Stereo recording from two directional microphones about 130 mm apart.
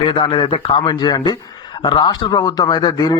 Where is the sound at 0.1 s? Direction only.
40° left (ahead or behind).